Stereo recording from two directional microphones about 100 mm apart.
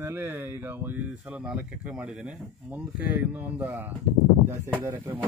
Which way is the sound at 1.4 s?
10° right (ahead or behind).